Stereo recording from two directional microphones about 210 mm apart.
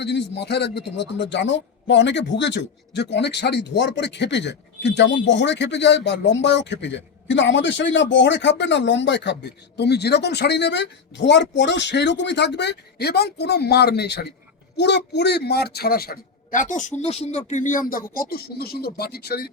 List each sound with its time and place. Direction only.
0.0 s a man's voice: 55° left (ahead or behind)